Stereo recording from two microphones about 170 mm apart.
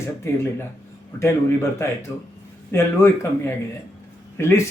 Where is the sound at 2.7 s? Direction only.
15° left (ahead or behind).